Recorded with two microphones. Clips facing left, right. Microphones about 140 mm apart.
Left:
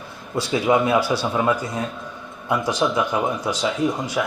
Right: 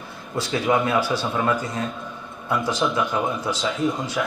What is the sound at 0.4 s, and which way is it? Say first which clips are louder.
A man's voice: left 3 dB; 10° left (ahead or behind).